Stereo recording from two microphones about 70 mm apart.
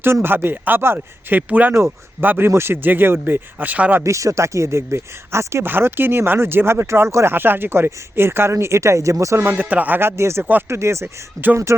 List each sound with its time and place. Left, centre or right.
0.0 s speech: right
0.9 s speech: right
4.0 s speech: right
5.6 s speech: right
9.4 s speech: right
11.4 s speech: right